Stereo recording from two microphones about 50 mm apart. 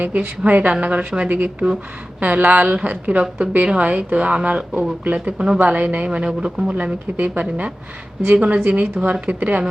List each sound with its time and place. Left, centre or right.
0.0 s a woman's voice: right
5.7 s a woman's voice: right
6.1 s speech: centre
8.6 s speech: right